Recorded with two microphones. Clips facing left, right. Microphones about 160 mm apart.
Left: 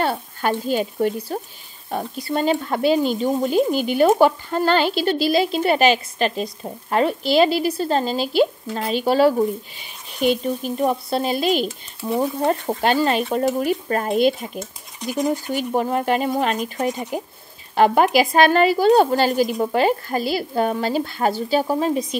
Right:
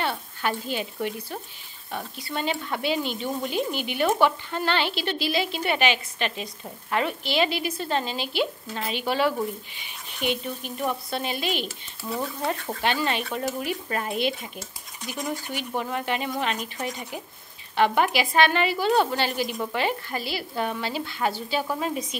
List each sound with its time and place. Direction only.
0.0 s speech: 40° left (ahead or behind)
12.0 s speech: 25° left (ahead or behind)
12.4 s speech: 40° left (ahead or behind)